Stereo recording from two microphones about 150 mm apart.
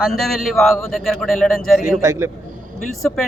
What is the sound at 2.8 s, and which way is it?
Speech, 5° left (ahead or behind).